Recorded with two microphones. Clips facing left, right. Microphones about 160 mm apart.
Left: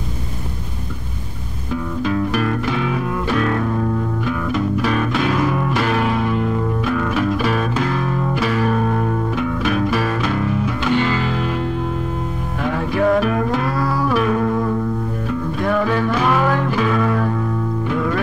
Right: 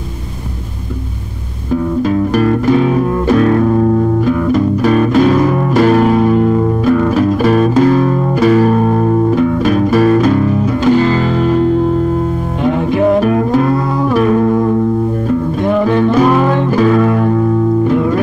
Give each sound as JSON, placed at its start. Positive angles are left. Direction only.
{"t": 2.0, "sound": "music", "side_deg": -40}
{"t": 12.6, "sound": "music", "side_deg": -20}
{"t": 13.2, "sound": "music", "side_deg": -35}
{"t": 15.8, "sound": "music", "side_deg": -25}
{"t": 16.7, "sound": "music", "side_deg": -40}